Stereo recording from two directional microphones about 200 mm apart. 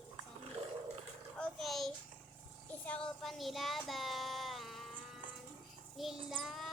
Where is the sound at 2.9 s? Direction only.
5° left (ahead or behind).